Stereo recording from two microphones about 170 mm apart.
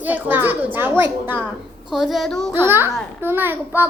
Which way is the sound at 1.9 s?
Centre (ahead or behind).